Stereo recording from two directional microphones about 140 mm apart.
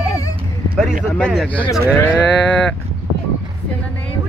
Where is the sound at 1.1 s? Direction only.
5° left (ahead or behind).